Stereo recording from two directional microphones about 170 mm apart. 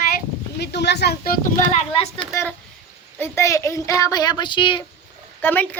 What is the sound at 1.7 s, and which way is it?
Speech, 35° left (ahead or behind).